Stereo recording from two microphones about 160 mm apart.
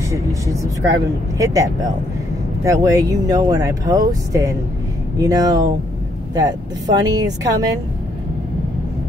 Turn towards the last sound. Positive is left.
turn(degrees=-25)  # may be behind; listen again after turning